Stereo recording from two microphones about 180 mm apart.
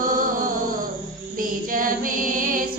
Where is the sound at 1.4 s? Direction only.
50° right (ahead or behind).